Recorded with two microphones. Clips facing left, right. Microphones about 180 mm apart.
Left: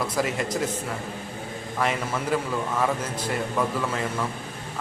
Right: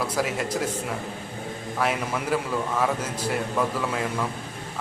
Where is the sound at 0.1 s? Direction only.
5° right (ahead or behind).